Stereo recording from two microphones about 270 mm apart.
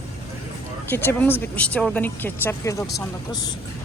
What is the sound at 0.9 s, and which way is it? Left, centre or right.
Speech, centre.